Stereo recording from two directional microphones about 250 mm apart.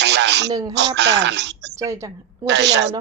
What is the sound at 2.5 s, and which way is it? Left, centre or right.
Speech, right.